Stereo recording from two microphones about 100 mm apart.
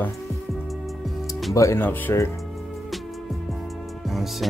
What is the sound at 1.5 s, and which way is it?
Speech, 30° left (ahead or behind).